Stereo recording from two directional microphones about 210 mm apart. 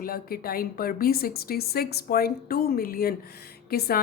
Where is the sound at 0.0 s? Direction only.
45° left (ahead or behind).